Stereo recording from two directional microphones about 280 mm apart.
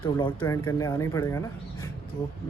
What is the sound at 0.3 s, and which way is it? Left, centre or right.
Speech, centre.